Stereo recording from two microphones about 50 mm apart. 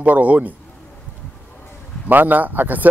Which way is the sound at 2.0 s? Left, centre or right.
Right.